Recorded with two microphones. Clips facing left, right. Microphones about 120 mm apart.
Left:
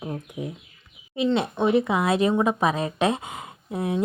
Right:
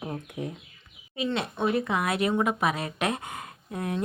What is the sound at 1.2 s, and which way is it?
Speech, 25° left (ahead or behind).